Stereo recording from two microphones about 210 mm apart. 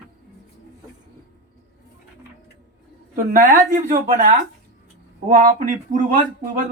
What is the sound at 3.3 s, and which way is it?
Speech, 40° right (ahead or behind).